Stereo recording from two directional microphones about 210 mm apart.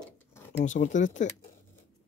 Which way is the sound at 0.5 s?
35° left (ahead or behind).